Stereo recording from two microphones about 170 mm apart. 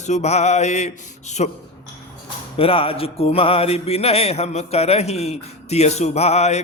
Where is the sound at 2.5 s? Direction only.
35° left (ahead or behind).